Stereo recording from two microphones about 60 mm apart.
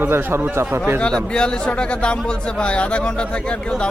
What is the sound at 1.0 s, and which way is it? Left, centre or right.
Speech, centre.